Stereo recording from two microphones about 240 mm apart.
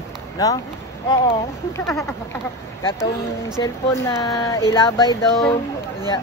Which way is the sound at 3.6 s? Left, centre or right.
Centre.